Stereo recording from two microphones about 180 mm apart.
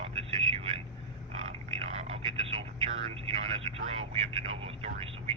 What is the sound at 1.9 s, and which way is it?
Speech, 35° right (ahead or behind).